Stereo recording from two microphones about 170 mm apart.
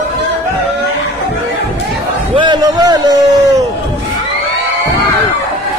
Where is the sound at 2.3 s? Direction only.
25° right (ahead or behind).